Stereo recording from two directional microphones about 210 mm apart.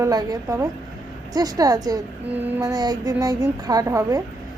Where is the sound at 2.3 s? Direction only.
10° right (ahead or behind).